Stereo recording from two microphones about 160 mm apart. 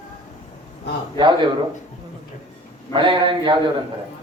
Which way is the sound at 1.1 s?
30° right (ahead or behind).